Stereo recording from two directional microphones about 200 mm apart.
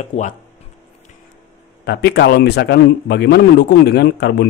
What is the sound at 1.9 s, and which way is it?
Speech, 55° left (ahead or behind).